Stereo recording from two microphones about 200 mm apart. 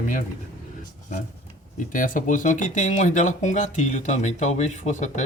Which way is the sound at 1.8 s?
40° left (ahead or behind).